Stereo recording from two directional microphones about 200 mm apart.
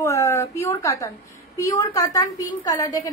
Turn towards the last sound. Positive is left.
turn(degrees=15)  # may be behind; listen again after turning